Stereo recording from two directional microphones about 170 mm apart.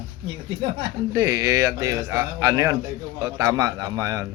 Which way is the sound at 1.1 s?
20° right (ahead or behind).